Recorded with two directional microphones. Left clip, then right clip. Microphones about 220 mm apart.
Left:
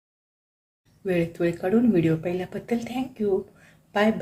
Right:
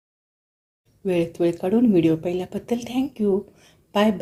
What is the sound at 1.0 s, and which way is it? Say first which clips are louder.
A woman's voice: right 3 dB; 30° right (ahead or behind).